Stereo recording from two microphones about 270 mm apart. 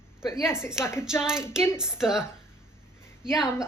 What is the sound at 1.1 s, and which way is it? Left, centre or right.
Speech, centre.